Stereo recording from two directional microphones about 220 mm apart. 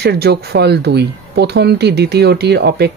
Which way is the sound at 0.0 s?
50° right (ahead or behind).